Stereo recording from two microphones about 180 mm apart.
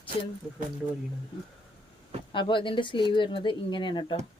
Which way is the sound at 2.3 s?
25° left (ahead or behind).